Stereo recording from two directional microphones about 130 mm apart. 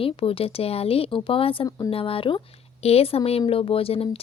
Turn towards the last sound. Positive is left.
turn(degrees=45)  # may be behind; listen again after turning